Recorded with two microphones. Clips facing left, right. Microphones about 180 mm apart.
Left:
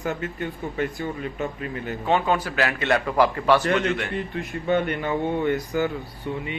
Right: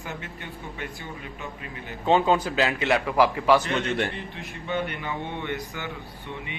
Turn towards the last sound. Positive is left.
turn(degrees=40)  # may be behind; listen again after turning